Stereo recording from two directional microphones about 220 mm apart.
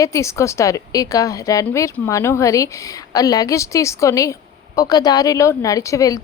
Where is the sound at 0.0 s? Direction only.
15° left (ahead or behind).